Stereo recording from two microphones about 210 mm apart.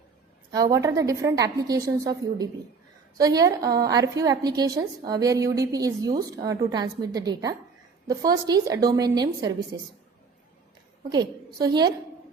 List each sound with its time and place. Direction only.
0.5 s a woman's voice: 15° right (ahead or behind)
11.6 s a woman's voice: 20° right (ahead or behind)